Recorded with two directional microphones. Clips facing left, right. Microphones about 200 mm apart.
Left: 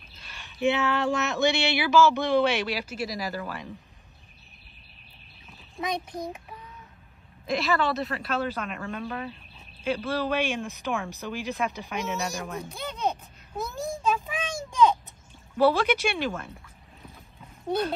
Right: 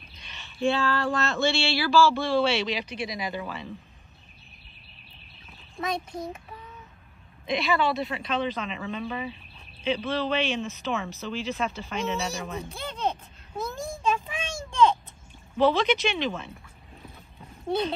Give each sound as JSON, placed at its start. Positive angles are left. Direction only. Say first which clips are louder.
{"t": 0.6, "sound": "speech", "louder": "even", "side_deg": 20}
{"t": 5.8, "sound": "speech", "louder": "even", "side_deg": 15}
{"t": 7.4, "sound": "speech", "louder": "even", "side_deg": 0}
{"t": 10.0, "sound": "speech", "louder": "left 1 dB", "side_deg": 10}
{"t": 14.0, "sound": "a sound", "louder": "right 1 dB", "side_deg": 5}
{"t": 15.5, "sound": "speech", "louder": "even", "side_deg": 10}
{"t": 17.6, "sound": "speech", "louder": "even", "side_deg": 10}